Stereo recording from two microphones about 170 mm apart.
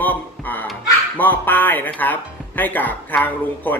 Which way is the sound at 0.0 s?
10° left (ahead or behind).